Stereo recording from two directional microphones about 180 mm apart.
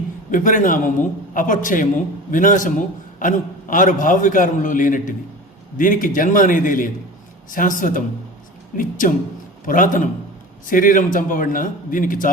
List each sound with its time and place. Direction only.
0.3 s a man's voice: 45° left (ahead or behind)